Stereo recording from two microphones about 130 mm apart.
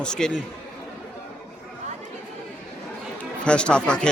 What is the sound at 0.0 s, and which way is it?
Speech, 5° left (ahead or behind).